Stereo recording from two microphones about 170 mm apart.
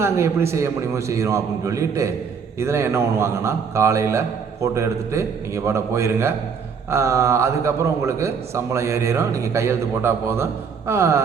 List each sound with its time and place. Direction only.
0.0 s a man's voice: 15° right (ahead or behind)